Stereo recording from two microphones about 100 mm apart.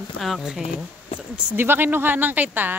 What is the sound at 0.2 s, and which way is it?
Speech, centre (ahead or behind).